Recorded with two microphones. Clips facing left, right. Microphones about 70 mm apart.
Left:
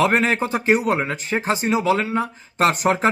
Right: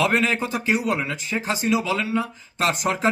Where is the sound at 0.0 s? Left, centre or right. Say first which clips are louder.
Left 3 dB; left.